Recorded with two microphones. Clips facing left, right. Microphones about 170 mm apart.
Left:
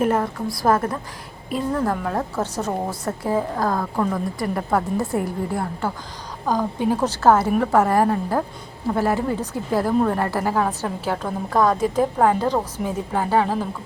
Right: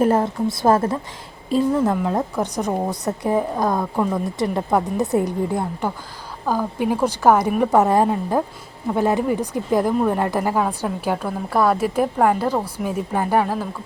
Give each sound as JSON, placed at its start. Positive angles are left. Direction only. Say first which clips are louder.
{"t": 0.0, "sound": "a woman's voice", "louder": "right 3 dB", "side_deg": -30}
{"t": 6.4, "sound": "a woman's voice", "louder": "even", "side_deg": -5}